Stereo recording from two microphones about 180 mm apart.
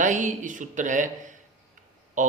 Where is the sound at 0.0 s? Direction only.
45° right (ahead or behind).